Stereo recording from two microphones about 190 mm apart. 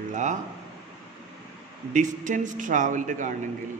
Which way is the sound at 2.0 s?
40° right (ahead or behind).